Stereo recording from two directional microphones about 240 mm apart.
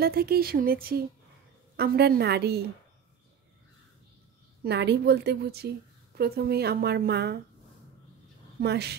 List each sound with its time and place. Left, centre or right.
0.0 s a woman's voice: right
4.6 s a woman's voice: right
8.5 s a woman's voice: right